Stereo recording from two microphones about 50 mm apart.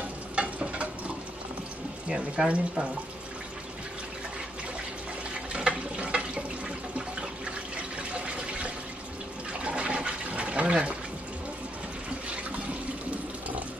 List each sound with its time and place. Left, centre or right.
0.4 s stir: right
2.0 s speech: centre
5.5 s water: right
9.5 s toilet flush: right